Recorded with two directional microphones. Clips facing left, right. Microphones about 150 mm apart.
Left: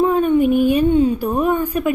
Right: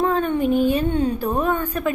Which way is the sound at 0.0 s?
10° left (ahead or behind).